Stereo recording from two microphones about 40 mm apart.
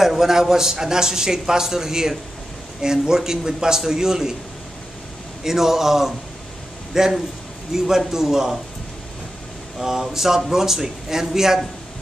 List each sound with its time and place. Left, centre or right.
0.0 s a man's voice: centre
5.4 s a man's voice: centre
9.8 s a man's voice: centre